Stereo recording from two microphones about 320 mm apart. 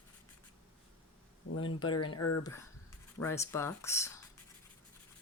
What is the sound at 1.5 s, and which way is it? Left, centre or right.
Speech, left.